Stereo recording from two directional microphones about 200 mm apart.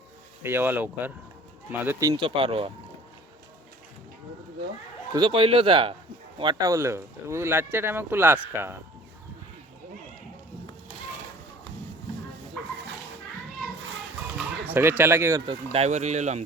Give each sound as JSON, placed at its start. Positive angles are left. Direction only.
{"t": 0.4, "sound": "speech", "side_deg": -10}
{"t": 5.1, "sound": "speech", "side_deg": -25}
{"t": 14.3, "sound": "speech", "side_deg": -10}
{"t": 15.4, "sound": "speech", "side_deg": -30}